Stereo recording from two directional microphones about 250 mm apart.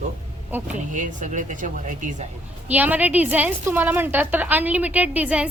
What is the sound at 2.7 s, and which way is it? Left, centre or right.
A woman's voice, centre.